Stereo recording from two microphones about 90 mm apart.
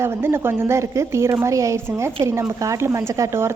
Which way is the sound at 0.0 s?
30° right (ahead or behind).